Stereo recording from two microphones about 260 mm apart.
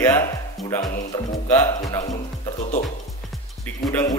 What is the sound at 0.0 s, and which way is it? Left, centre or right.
A man's voice, centre.